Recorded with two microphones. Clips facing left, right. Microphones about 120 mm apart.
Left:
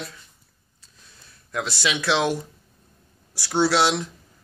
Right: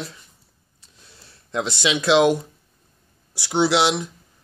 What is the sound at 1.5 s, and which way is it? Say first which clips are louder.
Speech: right 3 dB; 20° right (ahead or behind).